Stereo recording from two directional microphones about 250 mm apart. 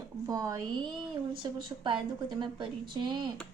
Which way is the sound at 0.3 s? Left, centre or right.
Centre.